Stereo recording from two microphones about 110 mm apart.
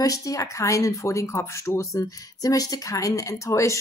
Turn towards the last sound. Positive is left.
turn(degrees=30)  # may be behind; listen again after turning